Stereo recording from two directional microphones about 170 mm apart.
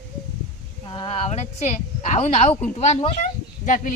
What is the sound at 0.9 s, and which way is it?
Speech, 30° left (ahead or behind).